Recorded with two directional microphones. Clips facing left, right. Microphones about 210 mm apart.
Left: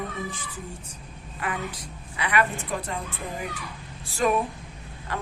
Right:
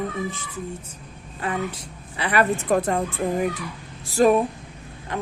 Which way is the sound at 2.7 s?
50° right (ahead or behind).